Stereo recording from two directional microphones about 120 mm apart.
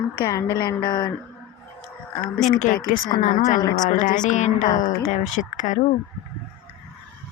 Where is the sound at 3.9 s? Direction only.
90° left.